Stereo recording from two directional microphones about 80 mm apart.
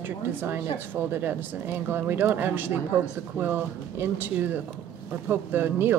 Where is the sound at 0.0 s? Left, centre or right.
Right.